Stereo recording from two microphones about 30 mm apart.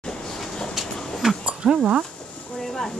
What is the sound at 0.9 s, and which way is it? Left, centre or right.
Dog, left.